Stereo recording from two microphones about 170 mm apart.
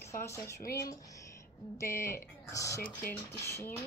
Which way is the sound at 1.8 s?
15° left (ahead or behind).